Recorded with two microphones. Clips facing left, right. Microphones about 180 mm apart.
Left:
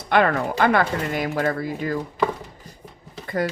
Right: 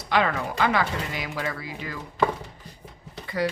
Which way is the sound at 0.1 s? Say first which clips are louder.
Left 5 dB; 55° left (ahead or behind).